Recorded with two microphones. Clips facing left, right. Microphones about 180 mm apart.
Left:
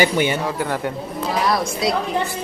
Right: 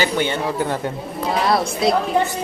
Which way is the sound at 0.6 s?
20° right (ahead or behind).